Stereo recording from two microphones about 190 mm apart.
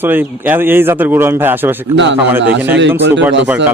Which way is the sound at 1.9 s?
70° right (ahead or behind).